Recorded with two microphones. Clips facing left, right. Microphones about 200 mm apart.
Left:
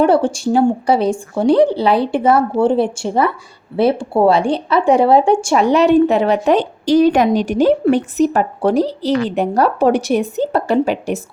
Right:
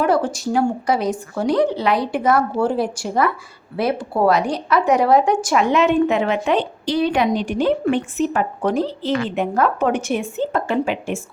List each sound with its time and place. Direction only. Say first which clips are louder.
0.0 s a woman's voice: left 5 dB; 30° left (ahead or behind)